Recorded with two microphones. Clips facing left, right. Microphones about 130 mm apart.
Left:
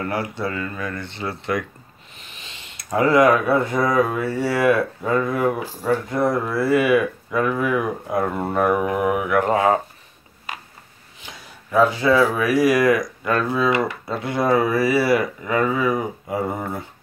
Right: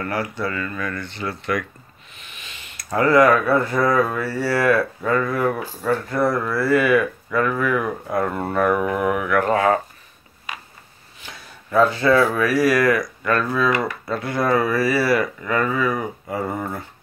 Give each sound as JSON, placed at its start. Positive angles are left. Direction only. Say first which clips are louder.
{"t": 0.0, "sound": "speech", "louder": "even", "side_deg": 20}
{"t": 11.2, "sound": "speech", "louder": "right 1 dB", "side_deg": 10}